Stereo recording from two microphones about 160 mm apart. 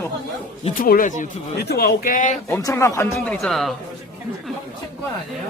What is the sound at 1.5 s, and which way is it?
Speech, 80° left.